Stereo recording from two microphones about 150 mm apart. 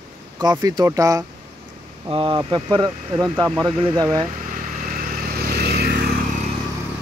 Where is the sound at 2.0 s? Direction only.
35° right (ahead or behind).